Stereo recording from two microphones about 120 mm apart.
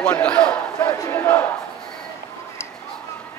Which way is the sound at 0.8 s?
20° left (ahead or behind).